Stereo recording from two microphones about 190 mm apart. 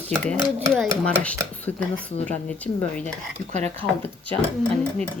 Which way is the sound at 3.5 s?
35° right (ahead or behind).